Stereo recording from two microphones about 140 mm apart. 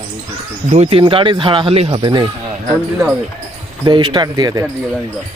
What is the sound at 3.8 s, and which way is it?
Speech, 35° right (ahead or behind).